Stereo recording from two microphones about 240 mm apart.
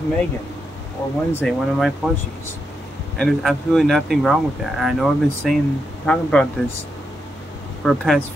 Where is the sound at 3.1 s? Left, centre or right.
Centre.